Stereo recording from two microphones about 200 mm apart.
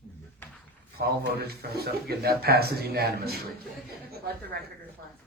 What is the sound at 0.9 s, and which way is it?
Speech, 55° right (ahead or behind).